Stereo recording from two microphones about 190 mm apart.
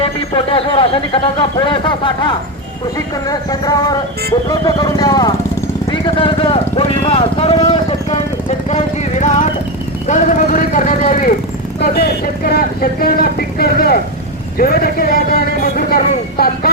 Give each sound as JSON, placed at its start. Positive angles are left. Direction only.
{"t": 0.0, "sound": "speech", "side_deg": 30}
{"t": 3.2, "sound": "speech", "side_deg": 20}
{"t": 11.8, "sound": "speech", "side_deg": 55}